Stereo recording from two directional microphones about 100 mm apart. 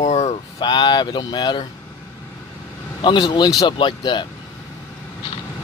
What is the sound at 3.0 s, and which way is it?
Speech, 50° left (ahead or behind).